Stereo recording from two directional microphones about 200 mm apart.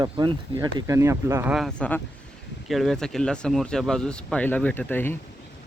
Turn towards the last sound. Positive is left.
turn(degrees=10)  # may be behind; listen again after turning